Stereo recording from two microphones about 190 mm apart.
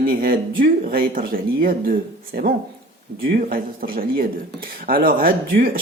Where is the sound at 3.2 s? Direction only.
50° right (ahead or behind).